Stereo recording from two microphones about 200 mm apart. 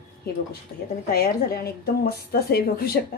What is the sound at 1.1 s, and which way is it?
A woman's voice, 50° left (ahead or behind).